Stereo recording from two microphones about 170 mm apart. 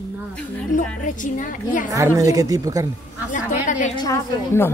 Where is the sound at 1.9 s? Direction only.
20° right (ahead or behind).